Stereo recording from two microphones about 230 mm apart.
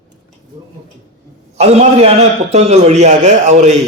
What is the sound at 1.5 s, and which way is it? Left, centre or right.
A man's voice, right.